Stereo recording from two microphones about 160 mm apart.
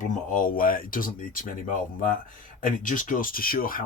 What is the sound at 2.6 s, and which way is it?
Speech, 55° left (ahead or behind).